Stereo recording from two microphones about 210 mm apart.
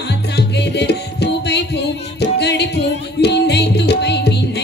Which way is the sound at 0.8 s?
55° left (ahead or behind).